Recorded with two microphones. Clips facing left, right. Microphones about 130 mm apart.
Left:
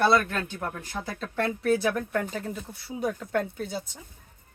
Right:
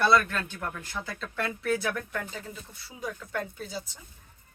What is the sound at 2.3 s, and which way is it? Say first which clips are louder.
Speech: left 7 dB; 60° left (ahead or behind).